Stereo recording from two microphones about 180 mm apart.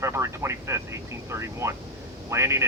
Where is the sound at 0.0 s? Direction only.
15° right (ahead or behind).